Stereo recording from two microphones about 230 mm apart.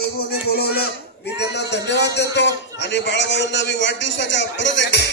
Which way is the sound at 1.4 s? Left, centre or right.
Left.